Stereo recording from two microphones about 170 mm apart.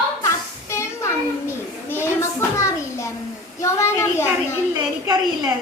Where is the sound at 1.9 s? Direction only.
15° left (ahead or behind).